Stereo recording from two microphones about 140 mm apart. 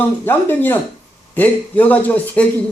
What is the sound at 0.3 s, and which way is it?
A man's voice, 15° left (ahead or behind).